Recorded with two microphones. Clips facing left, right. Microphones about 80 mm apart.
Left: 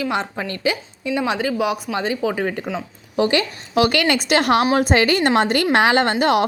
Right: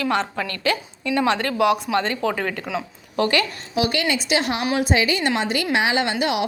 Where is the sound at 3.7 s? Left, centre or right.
Left.